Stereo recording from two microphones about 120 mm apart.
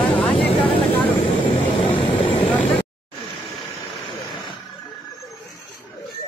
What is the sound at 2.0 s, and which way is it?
Vehicle, 50° left (ahead or behind).